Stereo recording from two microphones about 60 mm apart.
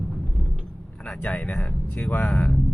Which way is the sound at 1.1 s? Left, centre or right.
Left.